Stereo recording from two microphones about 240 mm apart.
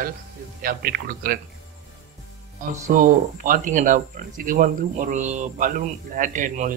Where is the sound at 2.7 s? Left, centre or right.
Right.